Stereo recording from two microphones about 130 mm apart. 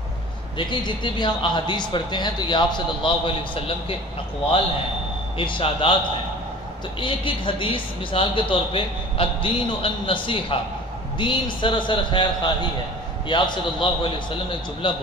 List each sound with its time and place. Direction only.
0.6 s a woman's voice: 40° left (ahead or behind)
5.4 s a woman's voice: 40° left (ahead or behind)
7.0 s a woman's voice: 40° left (ahead or behind)